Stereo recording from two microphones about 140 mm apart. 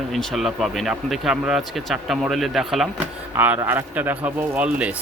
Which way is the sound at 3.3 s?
15° right (ahead or behind).